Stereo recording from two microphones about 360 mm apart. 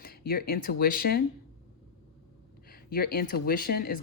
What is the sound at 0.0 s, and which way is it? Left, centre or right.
Speech, left.